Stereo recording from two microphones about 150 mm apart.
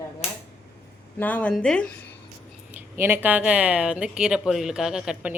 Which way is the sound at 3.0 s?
15° right (ahead or behind).